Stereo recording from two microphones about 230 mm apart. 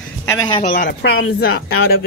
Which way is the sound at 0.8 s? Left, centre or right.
Left.